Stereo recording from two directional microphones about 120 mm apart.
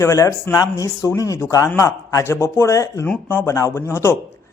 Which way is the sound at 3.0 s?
15° left (ahead or behind).